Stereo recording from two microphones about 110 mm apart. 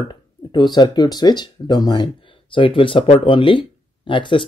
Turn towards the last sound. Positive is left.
turn(degrees=50)  # may be behind; listen again after turning